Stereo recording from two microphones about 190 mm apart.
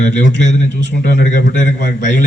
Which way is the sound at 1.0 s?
55° left (ahead or behind).